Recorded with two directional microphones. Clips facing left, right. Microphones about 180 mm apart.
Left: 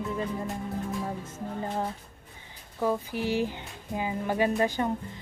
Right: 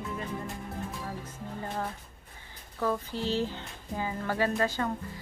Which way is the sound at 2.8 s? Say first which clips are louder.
Left 3 dB; 15° left (ahead or behind).